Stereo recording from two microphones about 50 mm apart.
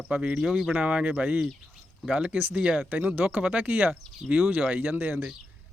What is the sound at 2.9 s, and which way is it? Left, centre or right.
Speech, right.